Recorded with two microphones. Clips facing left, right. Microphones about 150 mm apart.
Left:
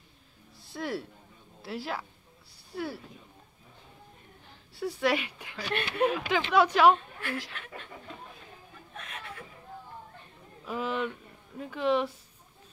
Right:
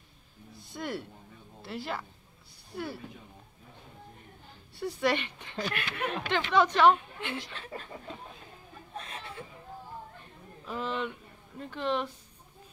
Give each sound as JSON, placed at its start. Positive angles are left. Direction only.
{"t": 0.6, "sound": "a sound", "side_deg": 5}
{"t": 1.6, "sound": "speech", "side_deg": 5}
{"t": 4.7, "sound": "speech", "side_deg": 5}
{"t": 5.7, "sound": "speech", "side_deg": 30}
{"t": 6.0, "sound": "speech", "side_deg": 5}
{"t": 7.2, "sound": "speech", "side_deg": -20}
{"t": 7.5, "sound": "speech", "side_deg": -35}
{"t": 8.9, "sound": "chuckle", "side_deg": -30}
{"t": 10.6, "sound": "speech", "side_deg": 5}